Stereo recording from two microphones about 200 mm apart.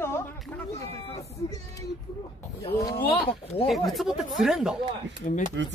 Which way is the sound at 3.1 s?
30° left (ahead or behind).